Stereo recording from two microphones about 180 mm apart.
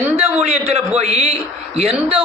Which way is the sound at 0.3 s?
35° right (ahead or behind).